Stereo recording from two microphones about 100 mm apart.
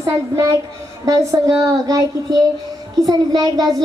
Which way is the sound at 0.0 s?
30° right (ahead or behind).